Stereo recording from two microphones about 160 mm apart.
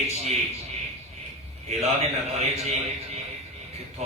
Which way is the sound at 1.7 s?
40° right (ahead or behind).